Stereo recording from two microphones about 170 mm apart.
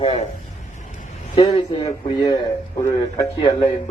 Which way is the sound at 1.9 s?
20° left (ahead or behind).